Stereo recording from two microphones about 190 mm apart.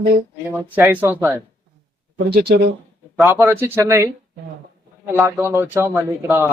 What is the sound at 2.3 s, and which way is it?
Speech, 60° right (ahead or behind).